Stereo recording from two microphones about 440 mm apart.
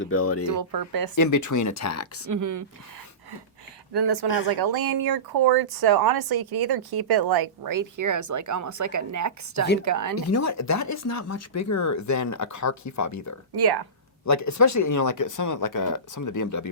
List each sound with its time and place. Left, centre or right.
0.0 s speech: left
0.7 s speech: right
1.1 s speech: left
2.2 s speech: right
3.9 s speech: right
10.2 s speech: left
13.6 s speech: right
14.3 s speech: left